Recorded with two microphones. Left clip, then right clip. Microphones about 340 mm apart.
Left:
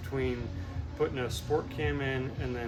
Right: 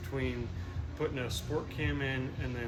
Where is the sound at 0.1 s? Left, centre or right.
Left.